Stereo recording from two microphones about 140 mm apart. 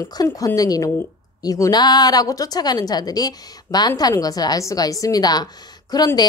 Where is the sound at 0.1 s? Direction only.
25° left (ahead or behind).